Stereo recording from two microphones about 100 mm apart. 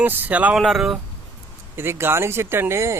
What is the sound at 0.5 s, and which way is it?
Speech, centre (ahead or behind).